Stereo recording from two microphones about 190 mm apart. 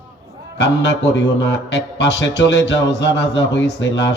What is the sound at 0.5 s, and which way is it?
Speech, 65° left (ahead or behind).